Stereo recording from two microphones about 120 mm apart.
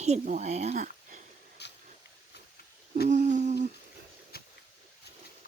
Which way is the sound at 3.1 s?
90° right.